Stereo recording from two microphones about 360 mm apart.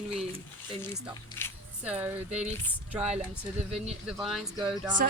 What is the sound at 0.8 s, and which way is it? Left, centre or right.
Speech, centre.